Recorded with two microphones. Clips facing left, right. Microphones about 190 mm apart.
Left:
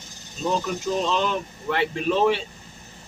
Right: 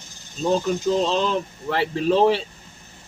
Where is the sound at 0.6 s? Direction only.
30° right (ahead or behind).